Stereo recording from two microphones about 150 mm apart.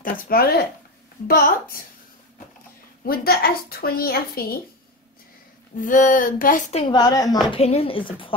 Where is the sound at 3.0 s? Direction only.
85° left.